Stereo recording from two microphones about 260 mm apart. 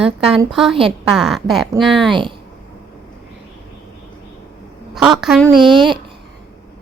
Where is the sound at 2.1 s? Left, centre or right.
Centre.